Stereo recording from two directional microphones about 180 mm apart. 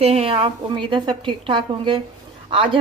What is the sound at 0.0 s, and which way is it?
A woman's voice, 35° right (ahead or behind).